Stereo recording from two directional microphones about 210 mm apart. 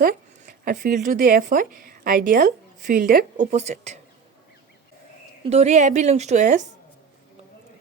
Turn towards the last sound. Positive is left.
turn(degrees=-35)  # may be behind; listen again after turning